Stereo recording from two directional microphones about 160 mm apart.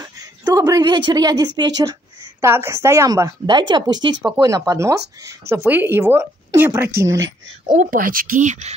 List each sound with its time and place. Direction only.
0.5 s speech: 25° right (ahead or behind)
7.7 s speech: 55° right (ahead or behind)